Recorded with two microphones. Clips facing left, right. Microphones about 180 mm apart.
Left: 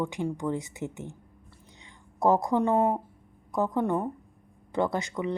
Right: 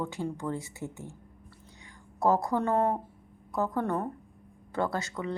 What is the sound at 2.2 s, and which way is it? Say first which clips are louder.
A woman's voice: left 3 dB; 20° left (ahead or behind).